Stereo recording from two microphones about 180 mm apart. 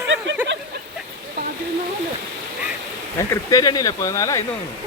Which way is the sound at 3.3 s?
20° left (ahead or behind).